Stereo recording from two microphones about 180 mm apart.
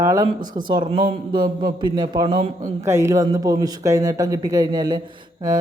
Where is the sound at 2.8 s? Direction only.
15° right (ahead or behind).